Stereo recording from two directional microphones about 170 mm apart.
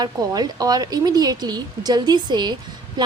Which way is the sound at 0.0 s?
25° right (ahead or behind).